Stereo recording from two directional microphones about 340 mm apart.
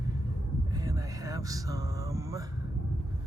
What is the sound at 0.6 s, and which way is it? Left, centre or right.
Vehicle, centre.